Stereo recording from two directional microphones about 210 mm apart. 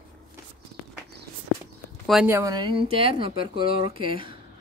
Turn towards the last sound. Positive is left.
turn(degrees=-25)  # may be behind; listen again after turning